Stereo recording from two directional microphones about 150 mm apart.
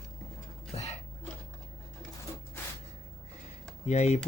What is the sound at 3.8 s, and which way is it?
Speech, 50° left (ahead or behind).